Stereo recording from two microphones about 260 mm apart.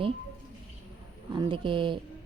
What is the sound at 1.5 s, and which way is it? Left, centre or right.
Speech, centre.